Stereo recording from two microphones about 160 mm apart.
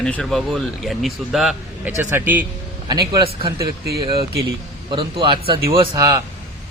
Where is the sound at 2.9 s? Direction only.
25° right (ahead or behind).